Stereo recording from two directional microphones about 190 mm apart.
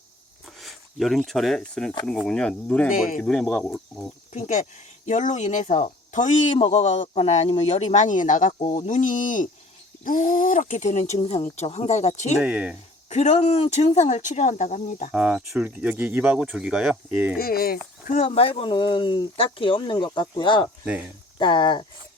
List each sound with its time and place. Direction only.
0.6 s speech: centre (ahead or behind)
2.9 s speech: 45° left (ahead or behind)
3.2 s speech: 5° left (ahead or behind)
4.3 s speech: 40° left (ahead or behind)
12.4 s speech: 5° right (ahead or behind)
13.1 s speech: 35° left (ahead or behind)
15.1 s speech: 5° right (ahead or behind)
17.3 s speech: 50° left (ahead or behind)
17.7 s speech: 40° left (ahead or behind); by 21.8 s 25° left (ahead or behind)